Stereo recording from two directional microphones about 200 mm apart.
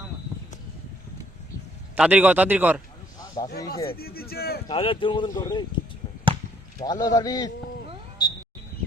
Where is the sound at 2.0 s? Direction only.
5° right (ahead or behind).